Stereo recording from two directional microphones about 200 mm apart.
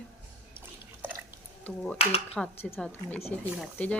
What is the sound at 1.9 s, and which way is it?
Speech, 30° left (ahead or behind).